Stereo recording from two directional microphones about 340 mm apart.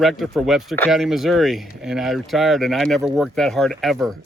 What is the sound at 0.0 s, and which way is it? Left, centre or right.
Speech, centre.